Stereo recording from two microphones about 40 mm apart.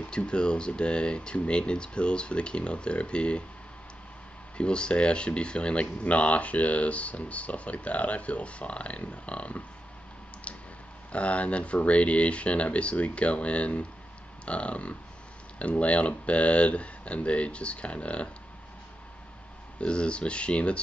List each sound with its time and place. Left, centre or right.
0.1 s speech: left
4.6 s speech: left
10.5 s a sound: left
11.1 s speech: left
19.8 s speech: left